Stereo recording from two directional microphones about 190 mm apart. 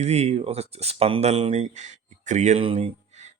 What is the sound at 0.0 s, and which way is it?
Speech, 35° right (ahead or behind).